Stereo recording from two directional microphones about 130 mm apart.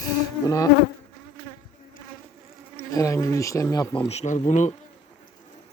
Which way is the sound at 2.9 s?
25° left (ahead or behind).